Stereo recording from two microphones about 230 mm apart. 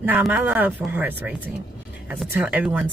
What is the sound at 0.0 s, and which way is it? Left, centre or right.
Speech, centre.